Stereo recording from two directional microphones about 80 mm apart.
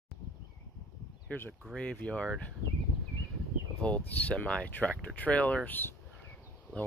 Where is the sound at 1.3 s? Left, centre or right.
Centre.